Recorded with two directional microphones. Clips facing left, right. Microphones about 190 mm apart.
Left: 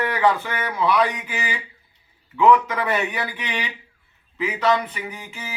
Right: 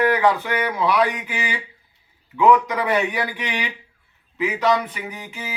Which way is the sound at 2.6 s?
10° right (ahead or behind).